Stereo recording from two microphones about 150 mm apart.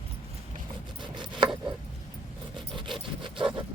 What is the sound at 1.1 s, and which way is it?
Chopping, 30° right (ahead or behind).